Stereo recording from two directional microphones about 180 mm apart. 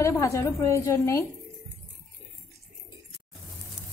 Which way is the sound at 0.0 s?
15° left (ahead or behind).